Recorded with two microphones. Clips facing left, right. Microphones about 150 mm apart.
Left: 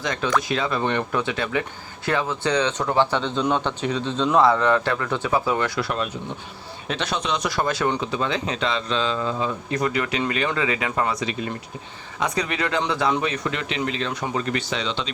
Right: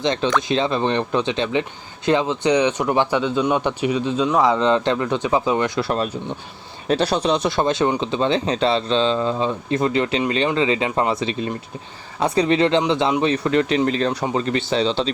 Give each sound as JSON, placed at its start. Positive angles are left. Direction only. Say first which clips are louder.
{"t": 0.0, "sound": "speech", "louder": "right 4 dB", "side_deg": -25}
{"t": 6.8, "sound": "speech", "louder": "right 8 dB", "side_deg": -35}
{"t": 13.2, "sound": "speech", "louder": "right 8 dB", "side_deg": -30}